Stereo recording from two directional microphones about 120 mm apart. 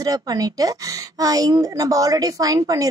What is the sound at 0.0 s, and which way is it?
Speech, 30° right (ahead or behind).